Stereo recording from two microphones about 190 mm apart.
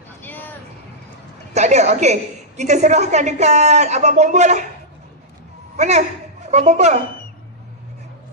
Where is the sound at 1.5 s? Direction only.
35° right (ahead or behind).